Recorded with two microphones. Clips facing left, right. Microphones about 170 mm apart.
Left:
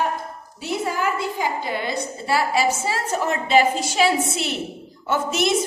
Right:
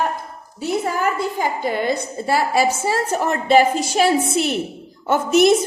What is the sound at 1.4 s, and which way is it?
A woman's voice, 50° right (ahead or behind).